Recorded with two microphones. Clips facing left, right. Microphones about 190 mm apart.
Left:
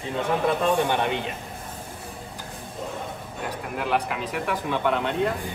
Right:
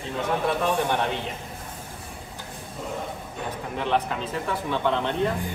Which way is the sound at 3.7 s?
5° left (ahead or behind).